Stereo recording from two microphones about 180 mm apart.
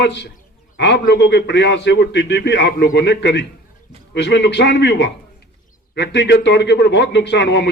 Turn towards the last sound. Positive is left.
turn(degrees=70)  # may be behind; listen again after turning